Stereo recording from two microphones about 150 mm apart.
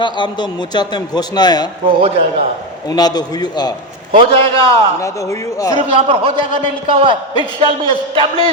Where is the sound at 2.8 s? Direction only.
25° left (ahead or behind).